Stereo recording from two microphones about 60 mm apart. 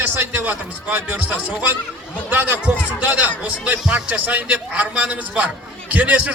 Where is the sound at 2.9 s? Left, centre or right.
Right.